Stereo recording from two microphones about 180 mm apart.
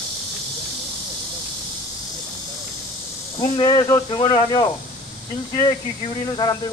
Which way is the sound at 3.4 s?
25° left (ahead or behind).